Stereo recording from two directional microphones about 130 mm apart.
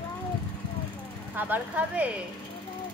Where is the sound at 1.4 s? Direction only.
10° right (ahead or behind).